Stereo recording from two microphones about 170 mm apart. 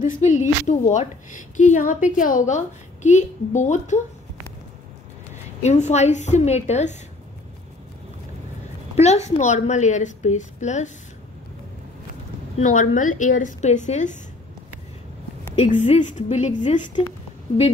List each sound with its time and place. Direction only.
0.0 s a woman's voice: 45° left (ahead or behind)
5.6 s a woman's voice: 40° left (ahead or behind)
8.9 s a woman's voice: 40° left (ahead or behind)
12.5 s a woman's voice: 50° left (ahead or behind)
15.5 s a woman's voice: 40° left (ahead or behind)